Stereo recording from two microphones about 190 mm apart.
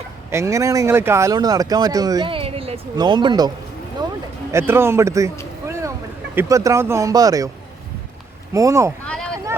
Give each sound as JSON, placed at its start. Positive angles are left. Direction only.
{"t": 0.3, "sound": "speech", "side_deg": -15}
{"t": 4.5, "sound": "speech", "side_deg": -10}
{"t": 5.6, "sound": "boat", "side_deg": -15}
{"t": 6.3, "sound": "speech", "side_deg": -15}
{"t": 8.5, "sound": "speech", "side_deg": -15}
{"t": 9.0, "sound": "a sound", "side_deg": 5}